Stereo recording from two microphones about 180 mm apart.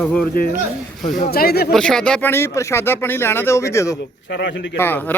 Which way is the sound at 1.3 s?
60° left (ahead or behind).